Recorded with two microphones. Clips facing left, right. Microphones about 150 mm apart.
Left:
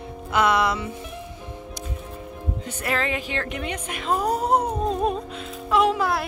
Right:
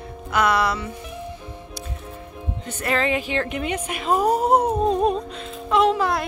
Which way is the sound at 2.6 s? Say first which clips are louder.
Right 4 dB; 5° left (ahead or behind).